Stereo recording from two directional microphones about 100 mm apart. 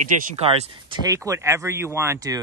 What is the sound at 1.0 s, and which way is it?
Speech, 30° right (ahead or behind).